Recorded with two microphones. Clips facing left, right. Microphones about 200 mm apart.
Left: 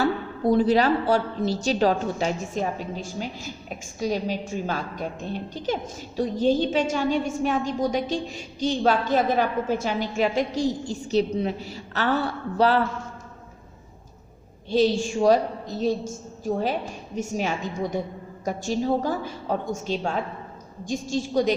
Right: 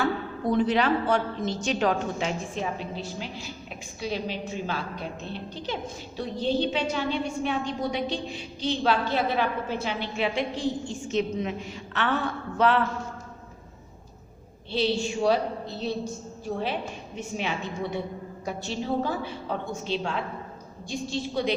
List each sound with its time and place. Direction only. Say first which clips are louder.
0.0 s a woman's voice: left 4 dB; 35° left (ahead or behind)
14.7 s a woman's voice: left 5 dB; 45° left (ahead or behind)